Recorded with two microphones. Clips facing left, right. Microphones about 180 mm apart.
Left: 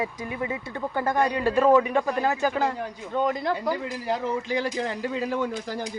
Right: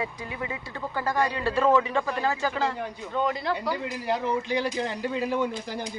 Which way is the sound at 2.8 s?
45° left (ahead or behind).